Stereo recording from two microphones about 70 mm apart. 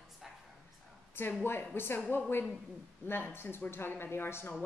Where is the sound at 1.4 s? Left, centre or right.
Left.